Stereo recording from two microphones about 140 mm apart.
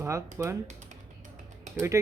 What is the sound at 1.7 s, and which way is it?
Speech, 25° right (ahead or behind).